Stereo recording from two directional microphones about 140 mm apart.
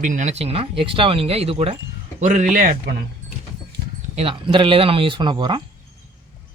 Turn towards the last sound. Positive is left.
turn(degrees=-35)  # may be behind; listen again after turning